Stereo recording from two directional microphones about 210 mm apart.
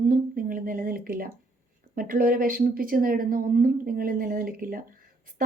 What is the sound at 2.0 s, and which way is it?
A woman's voice, 40° right (ahead or behind).